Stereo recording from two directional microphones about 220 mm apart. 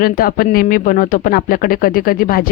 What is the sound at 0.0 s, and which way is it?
Speech, 40° left (ahead or behind).